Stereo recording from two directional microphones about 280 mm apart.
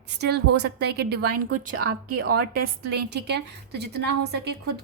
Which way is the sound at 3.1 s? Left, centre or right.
Right.